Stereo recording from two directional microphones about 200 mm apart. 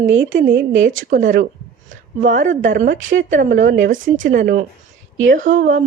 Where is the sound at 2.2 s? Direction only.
40° right (ahead or behind).